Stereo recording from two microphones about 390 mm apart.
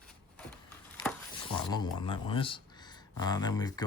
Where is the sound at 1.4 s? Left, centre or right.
Centre.